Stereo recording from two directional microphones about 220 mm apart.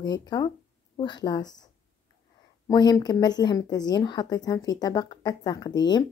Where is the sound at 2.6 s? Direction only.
15° left (ahead or behind).